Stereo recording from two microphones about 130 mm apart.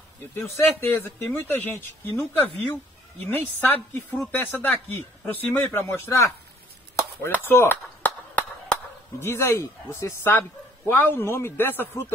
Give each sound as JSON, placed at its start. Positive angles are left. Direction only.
{"t": 0.3, "sound": "a woman's voice", "side_deg": 15}
{"t": 7.0, "sound": "chop", "side_deg": 20}
{"t": 9.2, "sound": "a woman's voice", "side_deg": 20}